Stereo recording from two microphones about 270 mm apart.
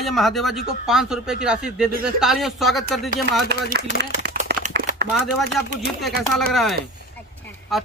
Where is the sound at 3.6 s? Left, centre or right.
Right.